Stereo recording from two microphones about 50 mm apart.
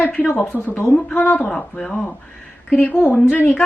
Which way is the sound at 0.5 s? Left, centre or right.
Left.